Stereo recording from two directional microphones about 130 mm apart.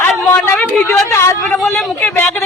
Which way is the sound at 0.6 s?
Centre (ahead or behind).